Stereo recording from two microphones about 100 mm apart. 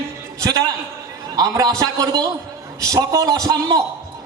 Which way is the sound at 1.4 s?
35° right (ahead or behind).